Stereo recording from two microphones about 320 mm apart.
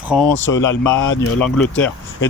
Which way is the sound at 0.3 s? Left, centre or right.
Left.